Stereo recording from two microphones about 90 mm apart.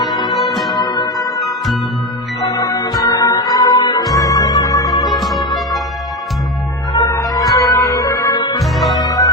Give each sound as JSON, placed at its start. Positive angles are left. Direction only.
{"t": 0.0, "sound": "music", "side_deg": 0}
{"t": 0.8, "sound": "music", "side_deg": 50}
{"t": 1.4, "sound": "music", "side_deg": 0}
{"t": 2.4, "sound": "music", "side_deg": 45}
{"t": 4.1, "sound": "music", "side_deg": 40}
{"t": 4.9, "sound": "music", "side_deg": 0}
{"t": 7.2, "sound": "music", "side_deg": 45}
{"t": 8.3, "sound": "music", "side_deg": 60}
{"t": 8.7, "sound": "music", "side_deg": 0}
{"t": 9.0, "sound": "music", "side_deg": 40}